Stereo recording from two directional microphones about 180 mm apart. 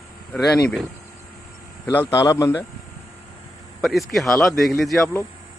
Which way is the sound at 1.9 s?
10° left (ahead or behind).